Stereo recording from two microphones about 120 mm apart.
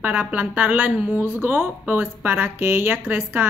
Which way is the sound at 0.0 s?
15° right (ahead or behind).